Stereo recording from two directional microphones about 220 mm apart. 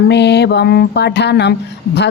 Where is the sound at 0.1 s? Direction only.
50° left (ahead or behind).